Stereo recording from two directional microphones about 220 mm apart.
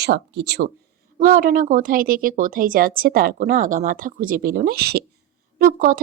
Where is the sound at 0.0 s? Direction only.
50° right (ahead or behind).